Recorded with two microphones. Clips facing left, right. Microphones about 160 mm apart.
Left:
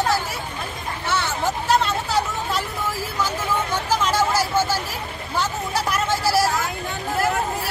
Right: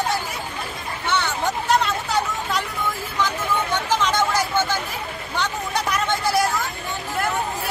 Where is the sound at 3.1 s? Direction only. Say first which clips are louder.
Right 1 dB; 10° left (ahead or behind).